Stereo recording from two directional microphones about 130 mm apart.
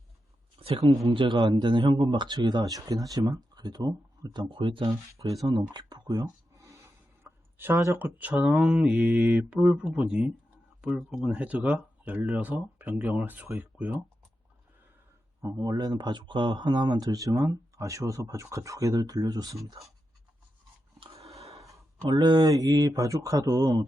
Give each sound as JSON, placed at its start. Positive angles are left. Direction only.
{"t": 0.8, "sound": "speech", "side_deg": -40}
{"t": 5.1, "sound": "speech", "side_deg": -25}
{"t": 15.4, "sound": "speech", "side_deg": -25}
{"t": 21.0, "sound": "a sound", "side_deg": -50}
{"t": 22.0, "sound": "speech", "side_deg": -35}